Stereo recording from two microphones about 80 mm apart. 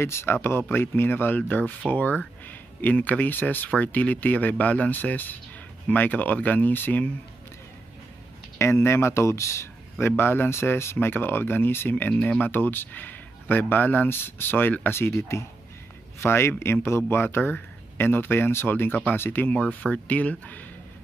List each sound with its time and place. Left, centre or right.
0.0 s a man's voice: left
8.5 s a man's voice: left
19.5 s a man's voice: centre